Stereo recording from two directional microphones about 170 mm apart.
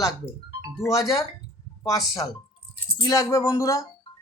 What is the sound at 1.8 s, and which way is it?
Speech, 20° left (ahead or behind).